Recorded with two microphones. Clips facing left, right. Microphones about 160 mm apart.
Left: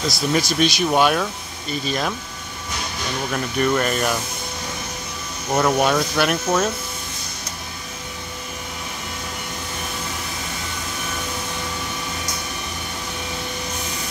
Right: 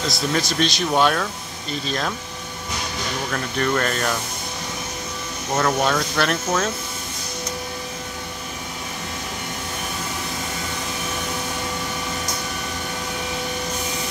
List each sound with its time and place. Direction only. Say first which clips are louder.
0.3 s speech: left 4 dB; 10° left (ahead or behind)
3.3 s speech: left 2 dB; 10° left (ahead or behind)
5.5 s speech: left 2 dB; 10° left (ahead or behind)